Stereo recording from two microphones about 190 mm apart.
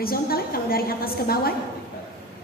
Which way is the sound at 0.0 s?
50° left (ahead or behind).